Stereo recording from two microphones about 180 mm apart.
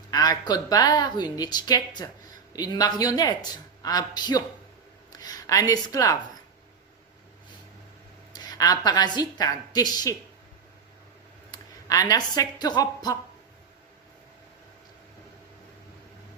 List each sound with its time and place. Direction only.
0.1 s a woman's voice: 20° left (ahead or behind)
8.3 s a woman's voice: 20° left (ahead or behind)
11.5 s a woman's voice: 20° left (ahead or behind)